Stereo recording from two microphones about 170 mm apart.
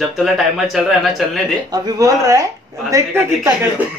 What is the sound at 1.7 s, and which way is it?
A man's voice, 20° right (ahead or behind).